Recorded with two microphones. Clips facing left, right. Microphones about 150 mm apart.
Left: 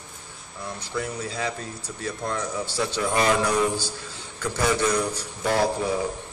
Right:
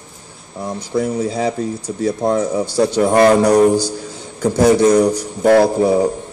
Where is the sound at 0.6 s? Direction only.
40° right (ahead or behind).